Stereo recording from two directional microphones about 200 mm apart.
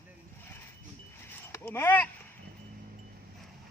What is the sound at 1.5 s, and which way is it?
Speech, 10° left (ahead or behind).